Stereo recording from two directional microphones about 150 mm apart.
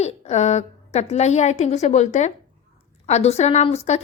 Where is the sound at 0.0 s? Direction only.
50° left (ahead or behind).